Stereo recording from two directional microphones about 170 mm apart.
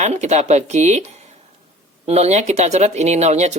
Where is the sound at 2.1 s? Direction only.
40° right (ahead or behind).